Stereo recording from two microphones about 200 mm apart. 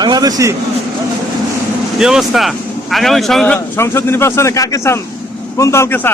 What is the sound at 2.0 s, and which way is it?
A man's voice, centre (ahead or behind).